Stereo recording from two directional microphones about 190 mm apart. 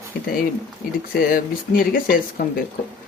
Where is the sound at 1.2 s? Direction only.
50° left (ahead or behind).